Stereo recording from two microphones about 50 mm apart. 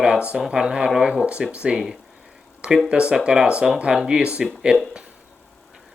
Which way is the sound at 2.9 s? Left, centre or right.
Centre.